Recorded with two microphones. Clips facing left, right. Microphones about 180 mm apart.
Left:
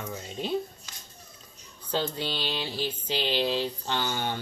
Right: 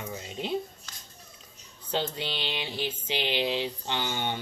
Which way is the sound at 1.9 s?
20° right (ahead or behind).